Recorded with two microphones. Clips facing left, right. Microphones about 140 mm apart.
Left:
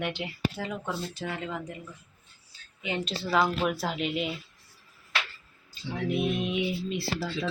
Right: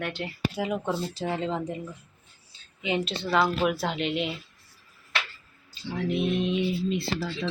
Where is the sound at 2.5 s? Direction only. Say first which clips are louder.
Right 5 dB; 20° right (ahead or behind).